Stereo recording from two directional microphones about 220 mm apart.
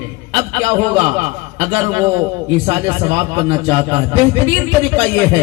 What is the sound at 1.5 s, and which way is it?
A man's voice, 25° right (ahead or behind).